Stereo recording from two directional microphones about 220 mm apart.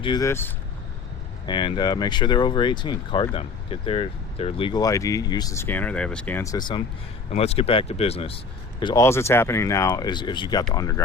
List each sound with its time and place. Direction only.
0.0 s speech: 15° left (ahead or behind)